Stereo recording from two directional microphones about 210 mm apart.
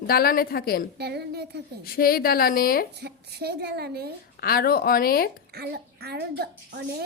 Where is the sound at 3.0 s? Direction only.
50° right (ahead or behind).